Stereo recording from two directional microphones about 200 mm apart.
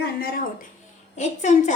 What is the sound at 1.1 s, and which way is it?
Speech, 35° left (ahead or behind).